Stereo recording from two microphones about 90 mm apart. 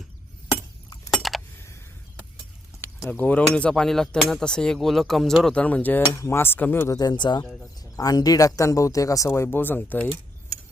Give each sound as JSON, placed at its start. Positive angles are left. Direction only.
{"t": 1.1, "sound": "keys jangling", "side_deg": 0}
{"t": 3.1, "sound": "speech", "side_deg": 15}
{"t": 5.5, "sound": "speech", "side_deg": 15}
{"t": 6.9, "sound": "speech", "side_deg": 50}
{"t": 7.9, "sound": "speech", "side_deg": 45}